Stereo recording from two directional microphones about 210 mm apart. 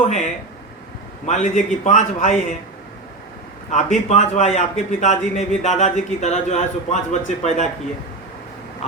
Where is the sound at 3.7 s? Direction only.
35° left (ahead or behind).